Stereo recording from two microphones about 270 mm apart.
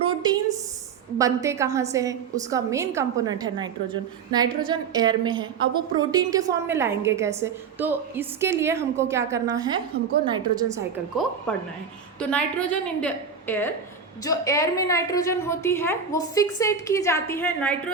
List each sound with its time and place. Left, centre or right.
0.0 s a sound: centre
1.2 s a woman's voice: centre
9.9 s a woman's voice: right
10.3 s a woman's voice: centre
11.5 s a woman's voice: centre